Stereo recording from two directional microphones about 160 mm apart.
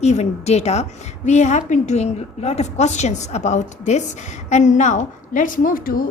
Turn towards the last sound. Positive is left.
turn(degrees=65)  # may be behind; listen again after turning